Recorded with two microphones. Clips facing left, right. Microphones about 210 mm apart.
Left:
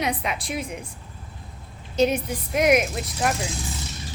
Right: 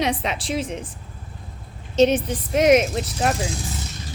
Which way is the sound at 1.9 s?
25° right (ahead or behind).